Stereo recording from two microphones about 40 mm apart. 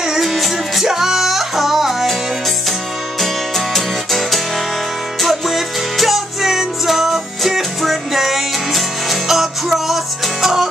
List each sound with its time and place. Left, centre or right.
0.0 s music: centre
3.2 s music: centre